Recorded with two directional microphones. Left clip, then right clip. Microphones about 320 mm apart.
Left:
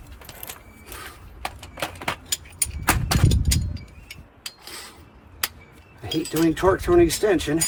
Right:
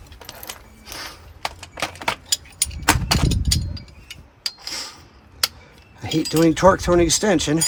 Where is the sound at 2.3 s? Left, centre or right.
Right.